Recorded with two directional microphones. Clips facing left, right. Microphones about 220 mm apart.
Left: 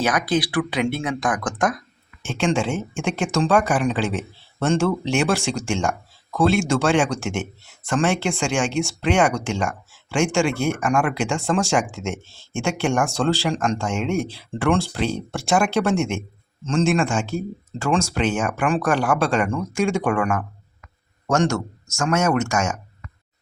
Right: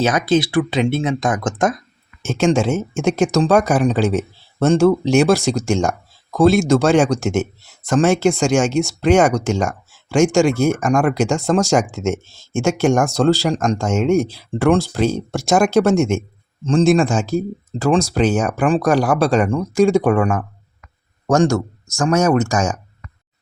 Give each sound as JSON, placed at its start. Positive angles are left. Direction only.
{"t": 0.0, "sound": "speech", "side_deg": -25}
{"t": 2.2, "sound": "speech", "side_deg": -40}